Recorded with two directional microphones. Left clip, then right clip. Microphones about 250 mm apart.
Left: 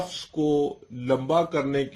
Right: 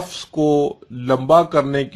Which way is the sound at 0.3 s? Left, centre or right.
Right.